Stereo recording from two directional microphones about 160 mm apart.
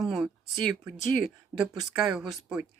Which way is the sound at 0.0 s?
Centre (ahead or behind).